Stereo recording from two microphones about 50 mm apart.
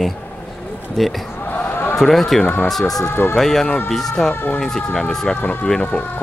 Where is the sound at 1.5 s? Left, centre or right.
Left.